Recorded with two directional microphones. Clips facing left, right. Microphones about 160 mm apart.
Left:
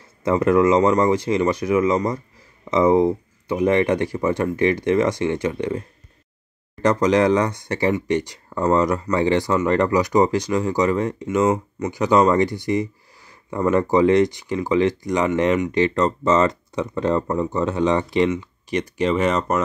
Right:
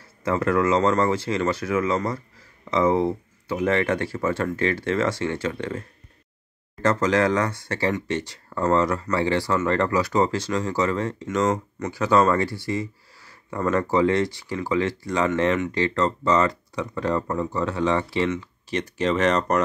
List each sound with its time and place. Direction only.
0.2 s speech: 20° left (ahead or behind)